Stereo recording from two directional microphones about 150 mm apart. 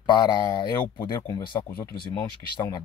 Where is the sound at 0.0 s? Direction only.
30° left (ahead or behind).